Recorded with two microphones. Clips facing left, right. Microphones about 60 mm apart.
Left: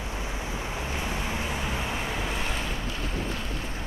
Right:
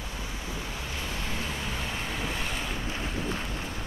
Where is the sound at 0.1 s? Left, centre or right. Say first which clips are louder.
Left 4 dB; left.